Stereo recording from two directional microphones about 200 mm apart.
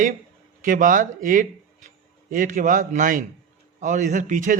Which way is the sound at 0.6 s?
40° right (ahead or behind).